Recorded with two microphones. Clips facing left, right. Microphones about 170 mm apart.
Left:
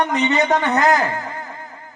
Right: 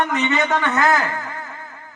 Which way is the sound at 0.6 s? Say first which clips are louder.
Left 2 dB; 35° left (ahead or behind).